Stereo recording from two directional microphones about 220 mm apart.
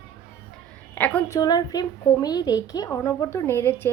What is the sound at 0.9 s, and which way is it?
Speech, 5° left (ahead or behind).